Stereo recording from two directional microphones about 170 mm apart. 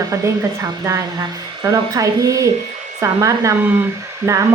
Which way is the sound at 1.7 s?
20° right (ahead or behind).